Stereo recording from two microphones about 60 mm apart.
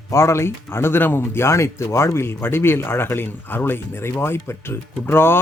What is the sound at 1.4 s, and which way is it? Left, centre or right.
Speech, left.